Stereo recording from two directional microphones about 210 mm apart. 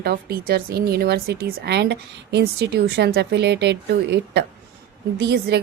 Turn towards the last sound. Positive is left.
turn(degrees=-55)  # may be behind; listen again after turning